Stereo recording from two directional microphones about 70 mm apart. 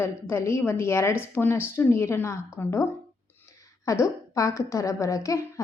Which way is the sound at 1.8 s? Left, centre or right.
Left.